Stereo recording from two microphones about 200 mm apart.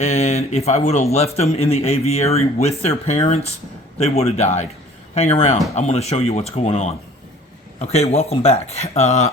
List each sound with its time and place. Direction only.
0.0 s speech: 35° left (ahead or behind)